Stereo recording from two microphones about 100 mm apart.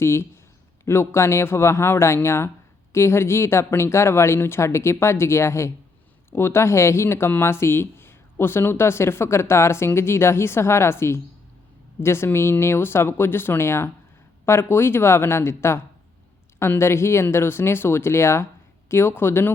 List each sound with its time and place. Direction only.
0.0 s speech: 25° left (ahead or behind)